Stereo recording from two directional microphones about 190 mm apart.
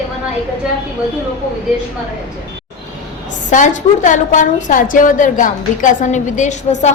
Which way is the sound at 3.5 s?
40° left (ahead or behind).